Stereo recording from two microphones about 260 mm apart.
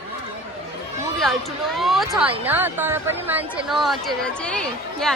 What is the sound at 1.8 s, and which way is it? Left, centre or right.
A woman's voice, centre.